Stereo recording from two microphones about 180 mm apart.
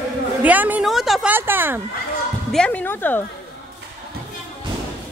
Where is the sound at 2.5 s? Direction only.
5° left (ahead or behind).